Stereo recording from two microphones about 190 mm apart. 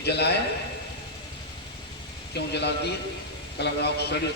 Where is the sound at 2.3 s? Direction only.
60° left (ahead or behind).